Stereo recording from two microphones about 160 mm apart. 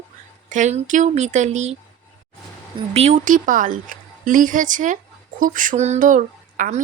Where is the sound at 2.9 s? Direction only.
40° right (ahead or behind).